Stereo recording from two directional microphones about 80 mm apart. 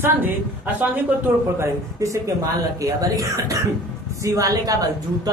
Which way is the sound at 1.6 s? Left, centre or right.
Right.